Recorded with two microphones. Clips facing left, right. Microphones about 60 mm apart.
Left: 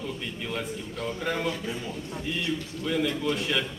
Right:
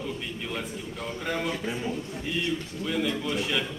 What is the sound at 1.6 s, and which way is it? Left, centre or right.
Speech, right.